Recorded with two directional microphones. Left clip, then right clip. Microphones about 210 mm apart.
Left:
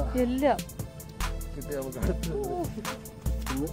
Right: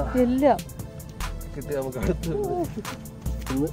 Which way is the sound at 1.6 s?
15° right (ahead or behind).